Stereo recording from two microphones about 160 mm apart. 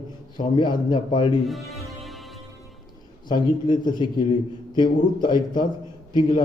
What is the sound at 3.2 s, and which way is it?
A man's voice, 30° left (ahead or behind).